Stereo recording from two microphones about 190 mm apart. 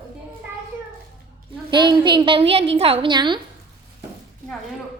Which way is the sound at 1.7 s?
25° right (ahead or behind).